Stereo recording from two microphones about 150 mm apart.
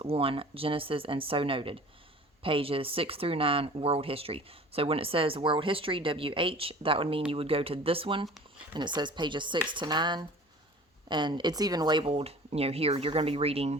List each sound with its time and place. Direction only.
0.0 s speech: 40° right (ahead or behind)